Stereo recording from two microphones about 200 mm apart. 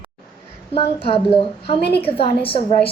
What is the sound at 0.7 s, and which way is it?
A woman's voice, 30° left (ahead or behind).